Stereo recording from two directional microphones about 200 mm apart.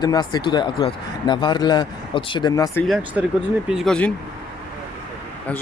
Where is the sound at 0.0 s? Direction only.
20° left (ahead or behind).